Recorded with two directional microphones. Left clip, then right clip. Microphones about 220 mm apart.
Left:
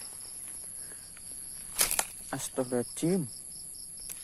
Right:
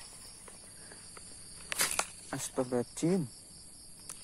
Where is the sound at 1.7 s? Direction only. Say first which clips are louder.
Left 2 dB; 30° left (ahead or behind).